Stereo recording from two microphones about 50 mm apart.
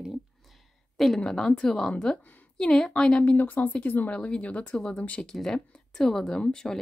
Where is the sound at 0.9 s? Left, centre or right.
Centre.